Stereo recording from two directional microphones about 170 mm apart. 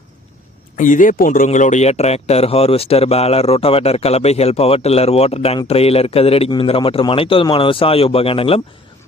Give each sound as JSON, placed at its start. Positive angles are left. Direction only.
{"t": 0.8, "sound": "speech", "side_deg": 50}